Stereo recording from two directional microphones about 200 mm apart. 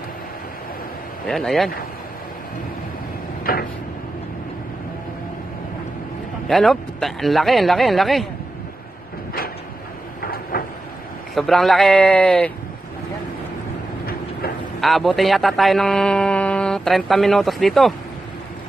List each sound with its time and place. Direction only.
1.2 s speech: centre (ahead or behind)
3.5 s a sound: 45° left (ahead or behind)
6.4 s speech: centre (ahead or behind)
10.2 s train: 50° left (ahead or behind)
11.3 s speech: centre (ahead or behind)
14.8 s a man's voice: centre (ahead or behind)